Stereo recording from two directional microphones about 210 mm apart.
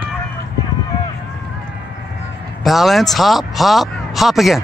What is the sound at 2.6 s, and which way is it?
Speech, centre (ahead or behind).